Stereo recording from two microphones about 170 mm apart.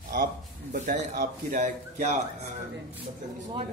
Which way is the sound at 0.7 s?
50° right (ahead or behind).